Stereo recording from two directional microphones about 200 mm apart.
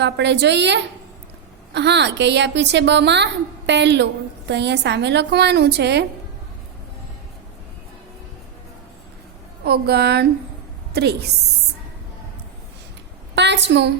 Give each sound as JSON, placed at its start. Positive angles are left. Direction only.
{"t": 0.0, "sound": "a woman's voice", "side_deg": -60}
{"t": 9.6, "sound": "a woman's voice", "side_deg": -55}
{"t": 13.3, "sound": "a woman's voice", "side_deg": -60}